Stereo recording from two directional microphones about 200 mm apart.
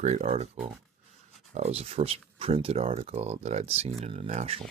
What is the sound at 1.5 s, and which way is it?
Speech, 30° right (ahead or behind).